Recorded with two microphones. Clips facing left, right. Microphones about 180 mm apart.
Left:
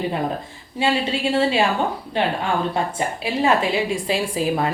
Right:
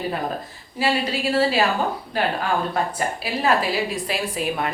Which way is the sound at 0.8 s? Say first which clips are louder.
Left 2 dB; 25° left (ahead or behind).